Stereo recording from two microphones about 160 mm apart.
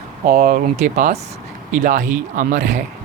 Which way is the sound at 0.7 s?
50° right (ahead or behind).